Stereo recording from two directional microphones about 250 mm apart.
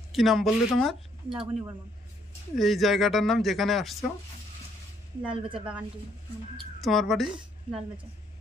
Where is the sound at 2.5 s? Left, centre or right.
Centre.